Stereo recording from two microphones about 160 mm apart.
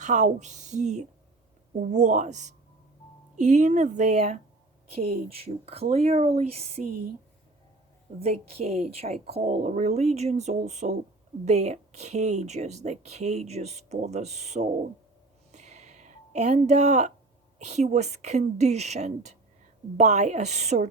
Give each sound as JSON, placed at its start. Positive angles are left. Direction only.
{"t": 0.0, "sound": "speech", "side_deg": -50}
{"t": 8.2, "sound": "speech", "side_deg": -40}
{"t": 15.5, "sound": "a sound", "side_deg": -45}
{"t": 17.6, "sound": "speech", "side_deg": -45}